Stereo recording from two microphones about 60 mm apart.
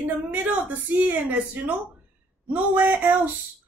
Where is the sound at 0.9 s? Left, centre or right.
Right.